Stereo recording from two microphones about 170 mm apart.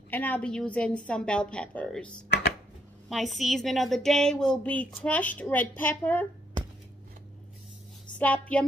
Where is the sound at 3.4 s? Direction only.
Centre (ahead or behind).